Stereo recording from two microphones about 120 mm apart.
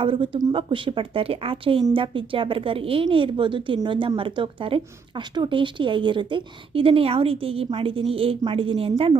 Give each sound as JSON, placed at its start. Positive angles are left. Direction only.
{"t": 0.0, "sound": "a woman's voice", "side_deg": -45}